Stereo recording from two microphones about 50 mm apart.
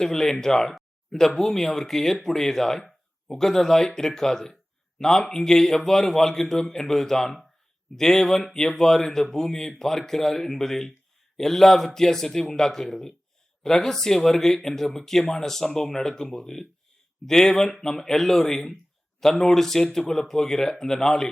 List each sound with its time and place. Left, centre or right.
0.0 s speech: centre